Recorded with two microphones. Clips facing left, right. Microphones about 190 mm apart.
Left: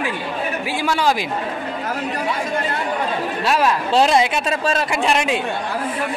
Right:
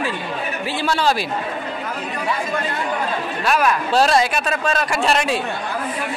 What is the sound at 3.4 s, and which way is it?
A man's voice, 25° left (ahead or behind).